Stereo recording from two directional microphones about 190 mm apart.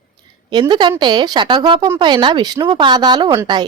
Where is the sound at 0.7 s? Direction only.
25° right (ahead or behind).